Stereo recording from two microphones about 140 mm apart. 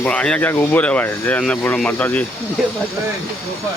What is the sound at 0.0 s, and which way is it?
Speech, 10° left (ahead or behind).